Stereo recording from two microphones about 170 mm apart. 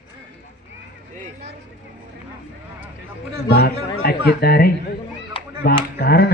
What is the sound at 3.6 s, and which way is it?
Speech, 65° left (ahead or behind).